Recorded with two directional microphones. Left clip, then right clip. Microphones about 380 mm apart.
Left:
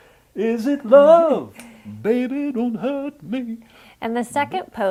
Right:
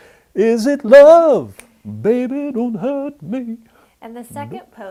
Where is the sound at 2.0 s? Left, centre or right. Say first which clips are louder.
Right 4 dB; right.